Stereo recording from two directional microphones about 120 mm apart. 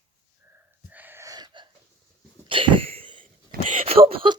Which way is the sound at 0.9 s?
15° right (ahead or behind).